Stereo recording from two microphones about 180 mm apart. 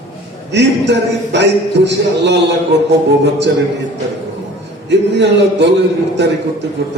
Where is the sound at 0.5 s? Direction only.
75° right (ahead or behind).